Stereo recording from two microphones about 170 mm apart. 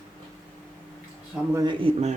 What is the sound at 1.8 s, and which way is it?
Speech, 40° right (ahead or behind).